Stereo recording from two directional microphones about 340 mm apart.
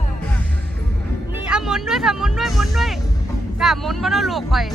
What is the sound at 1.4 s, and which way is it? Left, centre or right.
Speech, centre.